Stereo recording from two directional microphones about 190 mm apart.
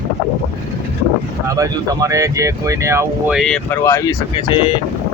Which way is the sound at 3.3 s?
5° left (ahead or behind).